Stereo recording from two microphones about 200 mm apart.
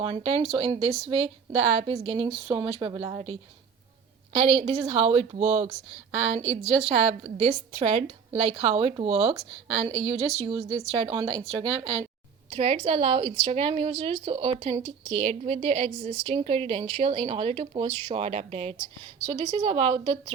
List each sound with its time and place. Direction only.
0.0 s a woman's voice: 30° right (ahead or behind)